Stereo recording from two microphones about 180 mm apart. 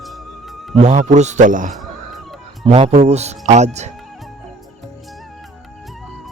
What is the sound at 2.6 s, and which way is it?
Speech, 35° right (ahead or behind).